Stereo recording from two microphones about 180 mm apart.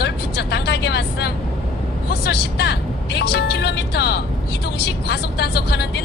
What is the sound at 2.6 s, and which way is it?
Music, 65° left (ahead or behind).